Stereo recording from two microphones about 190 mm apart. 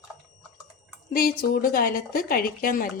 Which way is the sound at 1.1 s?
50° left (ahead or behind).